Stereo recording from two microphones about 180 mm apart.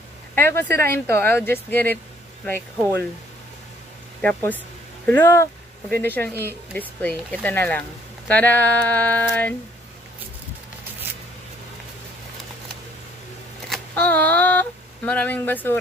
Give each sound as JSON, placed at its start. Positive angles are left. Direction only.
{"t": 0.3, "sound": "speech", "side_deg": 10}
{"t": 4.2, "sound": "speech", "side_deg": 10}
{"t": 13.7, "sound": "speech", "side_deg": 10}